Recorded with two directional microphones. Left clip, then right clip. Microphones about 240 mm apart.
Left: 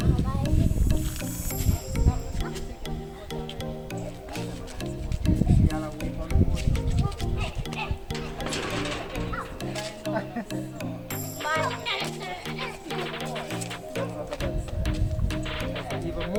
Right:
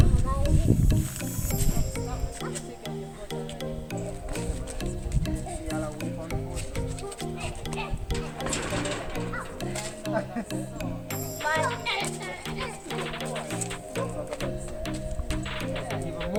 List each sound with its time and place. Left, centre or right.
0.0 s music: centre
4.8 s music: centre
9.7 s music: centre
10.5 s music: centre
11.4 s music: centre
15.3 s music: centre